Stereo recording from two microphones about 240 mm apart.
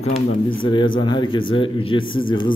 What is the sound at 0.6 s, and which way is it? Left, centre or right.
Speech, left.